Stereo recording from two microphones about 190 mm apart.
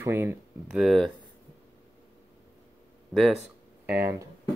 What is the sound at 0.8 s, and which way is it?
Speech, centre (ahead or behind).